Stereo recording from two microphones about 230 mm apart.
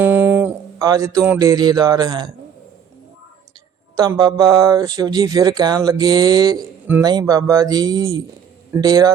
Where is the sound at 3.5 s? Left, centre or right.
Centre.